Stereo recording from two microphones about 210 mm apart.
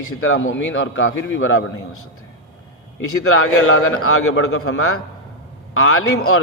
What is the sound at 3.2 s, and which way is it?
A man's voice, 85° left.